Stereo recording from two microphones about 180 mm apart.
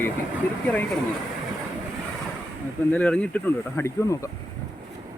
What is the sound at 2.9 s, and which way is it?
Speech, 10° left (ahead or behind).